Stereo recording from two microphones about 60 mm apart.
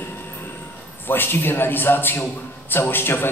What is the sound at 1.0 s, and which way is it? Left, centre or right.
A man's voice, left.